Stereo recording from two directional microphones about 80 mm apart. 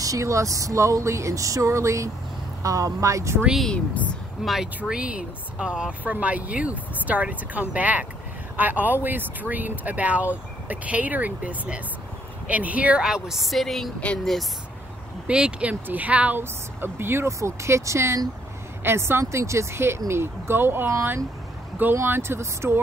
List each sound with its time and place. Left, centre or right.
0.0 s speech: right
3.6 s speech: centre
4.4 s speech: centre
15.2 s speech: centre; by 22.8 s right